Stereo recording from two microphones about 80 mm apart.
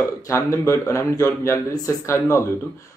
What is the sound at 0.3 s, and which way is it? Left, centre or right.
Speech, left.